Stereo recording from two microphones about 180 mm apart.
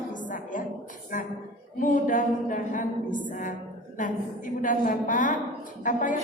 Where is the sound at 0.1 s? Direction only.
45° left (ahead or behind).